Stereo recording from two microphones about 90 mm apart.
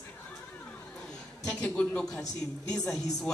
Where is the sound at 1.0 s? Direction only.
10° left (ahead or behind).